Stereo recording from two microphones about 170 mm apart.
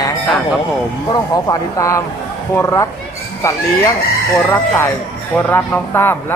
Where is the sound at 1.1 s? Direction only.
20° left (ahead or behind).